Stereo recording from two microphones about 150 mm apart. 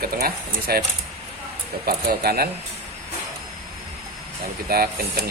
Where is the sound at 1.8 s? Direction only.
90° right.